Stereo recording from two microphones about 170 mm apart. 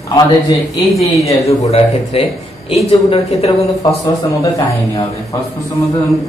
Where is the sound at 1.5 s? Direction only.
35° left (ahead or behind).